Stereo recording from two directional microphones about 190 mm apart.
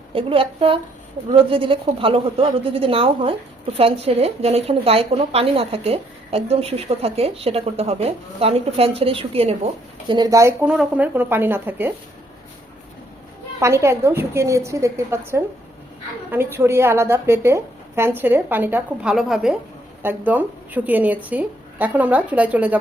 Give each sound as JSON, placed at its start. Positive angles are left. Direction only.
{"t": 0.1, "sound": "a woman's voice", "side_deg": -30}
{"t": 10.1, "sound": "a woman's voice", "side_deg": -20}
{"t": 13.6, "sound": "a woman's voice", "side_deg": -15}
{"t": 16.3, "sound": "a woman's voice", "side_deg": -10}